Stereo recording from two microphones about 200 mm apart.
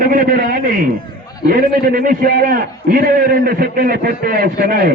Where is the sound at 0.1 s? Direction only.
45° right (ahead or behind).